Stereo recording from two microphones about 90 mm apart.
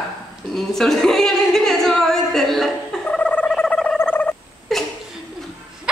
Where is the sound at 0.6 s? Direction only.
5° left (ahead or behind).